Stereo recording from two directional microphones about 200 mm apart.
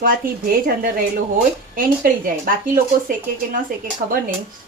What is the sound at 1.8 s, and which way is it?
Speech, 45° right (ahead or behind).